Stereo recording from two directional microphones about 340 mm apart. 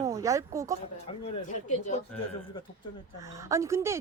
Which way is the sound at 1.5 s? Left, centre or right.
Left.